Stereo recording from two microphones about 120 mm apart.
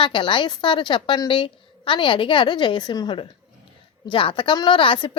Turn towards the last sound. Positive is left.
turn(degrees=45)  # may be behind; listen again after turning